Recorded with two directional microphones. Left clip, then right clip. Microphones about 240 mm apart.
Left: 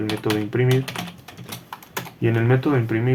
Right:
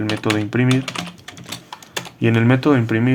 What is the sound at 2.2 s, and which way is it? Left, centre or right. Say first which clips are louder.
Speech: right 5 dB; right.